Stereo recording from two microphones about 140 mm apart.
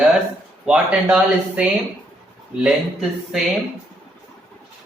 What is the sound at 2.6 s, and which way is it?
Speech, centre (ahead or behind).